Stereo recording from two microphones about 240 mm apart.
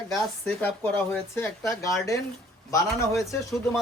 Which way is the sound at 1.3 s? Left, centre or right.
Centre.